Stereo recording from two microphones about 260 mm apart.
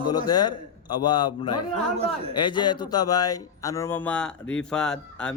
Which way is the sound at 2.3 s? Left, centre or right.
Centre.